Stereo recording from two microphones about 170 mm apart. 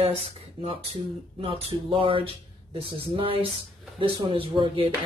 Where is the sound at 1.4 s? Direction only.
35° right (ahead or behind).